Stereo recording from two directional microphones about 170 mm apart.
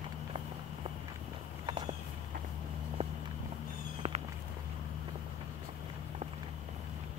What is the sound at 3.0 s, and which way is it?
Walk, 35° right (ahead or behind).